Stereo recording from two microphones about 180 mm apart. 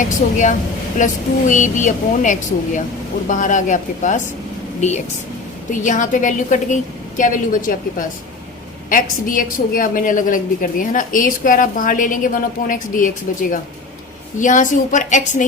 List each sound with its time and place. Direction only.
0.2 s a woman's voice: 40° left (ahead or behind)
14.3 s a woman's voice: 45° left (ahead or behind)